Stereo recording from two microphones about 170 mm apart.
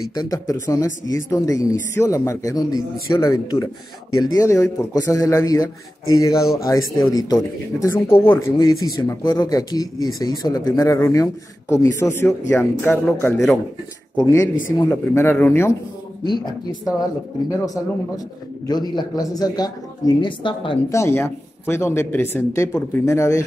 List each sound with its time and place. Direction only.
0.1 s speech: 20° left (ahead or behind)
14.9 s speech: 10° left (ahead or behind)
16.3 s speech: 25° left (ahead or behind)
20.9 s speech: 15° left (ahead or behind)